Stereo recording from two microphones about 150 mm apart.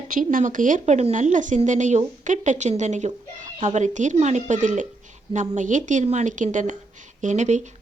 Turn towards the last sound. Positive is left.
turn(degrees=-50)  # may be behind; listen again after turning